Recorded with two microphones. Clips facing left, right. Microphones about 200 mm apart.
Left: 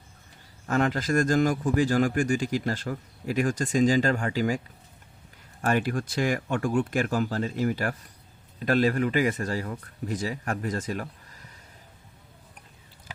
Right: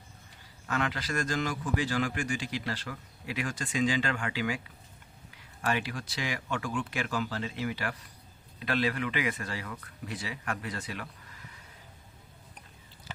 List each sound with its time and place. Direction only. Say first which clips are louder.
0.7 s a man's voice: left 8 dB; 45° left (ahead or behind)
5.6 s a man's voice: left 6 dB; 50° left (ahead or behind)